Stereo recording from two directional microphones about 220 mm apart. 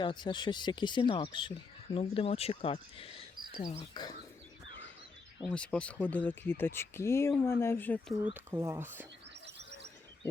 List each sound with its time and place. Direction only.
0.0 s speech: 20° left (ahead or behind)
5.5 s speech: 5° left (ahead or behind)
8.2 s speech: 10° right (ahead or behind)
9.6 s a sound: 50° right (ahead or behind)